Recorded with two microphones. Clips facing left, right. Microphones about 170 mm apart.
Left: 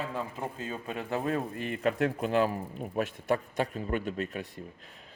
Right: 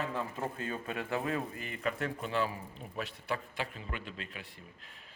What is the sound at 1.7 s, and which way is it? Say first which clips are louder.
A man's voice: left 8 dB; 45° left (ahead or behind).